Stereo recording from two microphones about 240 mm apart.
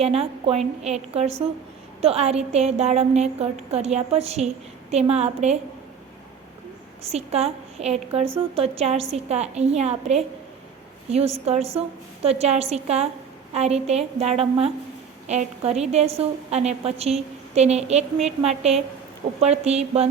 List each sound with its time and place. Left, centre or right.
0.0 s a woman's voice: right
7.0 s a woman's voice: right